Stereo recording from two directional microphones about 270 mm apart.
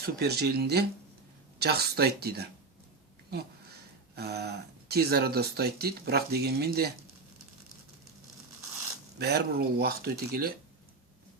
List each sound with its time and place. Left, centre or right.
0.0 s speech: right
9.1 s speech: right